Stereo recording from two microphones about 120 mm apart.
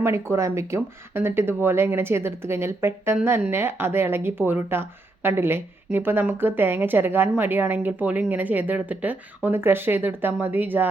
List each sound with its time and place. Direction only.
0.0 s speech: 20° right (ahead or behind)